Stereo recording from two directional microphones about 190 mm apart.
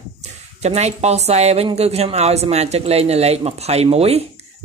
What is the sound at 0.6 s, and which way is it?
Speech, 35° right (ahead or behind).